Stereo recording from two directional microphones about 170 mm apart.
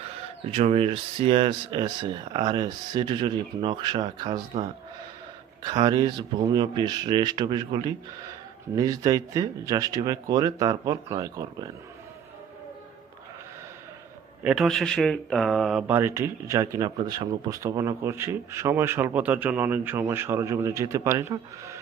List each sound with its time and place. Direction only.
0.5 s speech: 35° right (ahead or behind)
5.6 s speech: 25° right (ahead or behind)
14.4 s speech: centre (ahead or behind)
15.9 s speech: 10° right (ahead or behind)